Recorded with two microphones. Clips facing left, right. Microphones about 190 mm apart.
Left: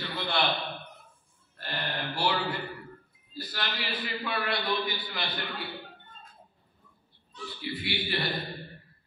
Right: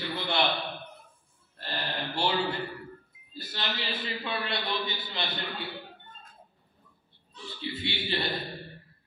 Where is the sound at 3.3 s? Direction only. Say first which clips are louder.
Even; 25° right (ahead or behind).